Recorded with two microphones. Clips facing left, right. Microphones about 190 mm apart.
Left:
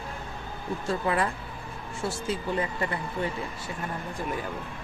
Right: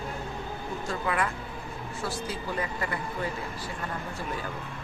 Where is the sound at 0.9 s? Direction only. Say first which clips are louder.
Left 3 dB; 30° left (ahead or behind).